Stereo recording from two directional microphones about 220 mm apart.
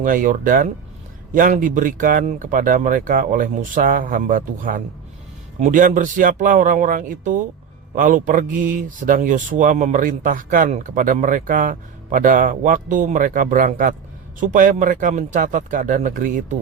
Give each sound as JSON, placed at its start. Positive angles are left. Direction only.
{"t": 0.0, "sound": "speech", "side_deg": -40}